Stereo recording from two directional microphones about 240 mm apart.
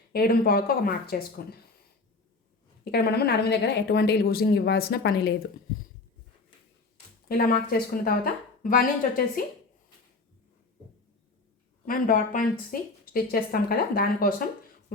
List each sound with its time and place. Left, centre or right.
0.1 s speech: left
2.9 s speech: left
7.3 s speech: left
11.9 s speech: left